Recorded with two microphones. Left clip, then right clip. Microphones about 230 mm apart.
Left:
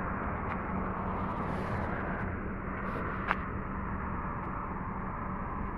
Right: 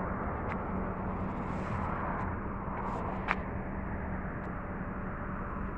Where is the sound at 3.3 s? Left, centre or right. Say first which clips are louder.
Left 1 dB; centre.